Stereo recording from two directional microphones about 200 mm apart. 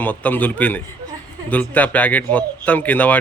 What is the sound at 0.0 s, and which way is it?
Speech, 10° left (ahead or behind).